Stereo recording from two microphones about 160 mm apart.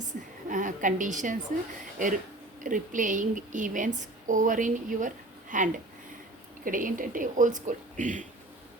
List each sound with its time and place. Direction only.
0.0 s a woman's voice: 55° right (ahead or behind)
2.6 s a woman's voice: 55° right (ahead or behind)